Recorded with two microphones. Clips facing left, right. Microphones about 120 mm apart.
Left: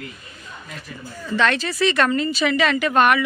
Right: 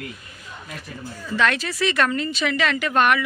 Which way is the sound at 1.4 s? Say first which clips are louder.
Left 2 dB; 5° right (ahead or behind).